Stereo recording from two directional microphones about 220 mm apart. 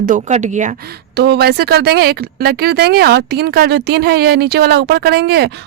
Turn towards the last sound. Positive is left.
turn(degrees=-50)  # may be behind; listen again after turning